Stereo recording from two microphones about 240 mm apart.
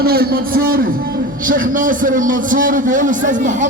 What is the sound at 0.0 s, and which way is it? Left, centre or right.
A man's voice, right.